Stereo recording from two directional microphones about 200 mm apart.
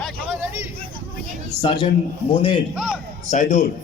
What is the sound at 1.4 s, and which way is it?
A man's voice, 20° left (ahead or behind).